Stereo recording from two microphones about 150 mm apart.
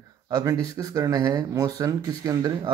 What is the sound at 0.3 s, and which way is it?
A man's voice, 25° right (ahead or behind).